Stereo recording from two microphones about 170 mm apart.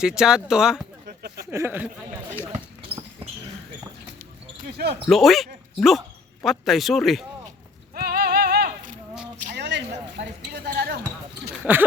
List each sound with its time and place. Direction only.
0.0 s a man's voice: 5° right (ahead or behind)
1.4 s speech: 15° right (ahead or behind)
2.4 s basketball bounce: 10° right (ahead or behind)
4.2 s basketball bounce: 60° right (ahead or behind)
5.0 s a man's voice: centre (ahead or behind)
7.9 s music: 65° right (ahead or behind)
9.6 s a sound: 85° right; by 11.0 s 65° right (ahead or behind)
11.6 s speech: 10° right (ahead or behind)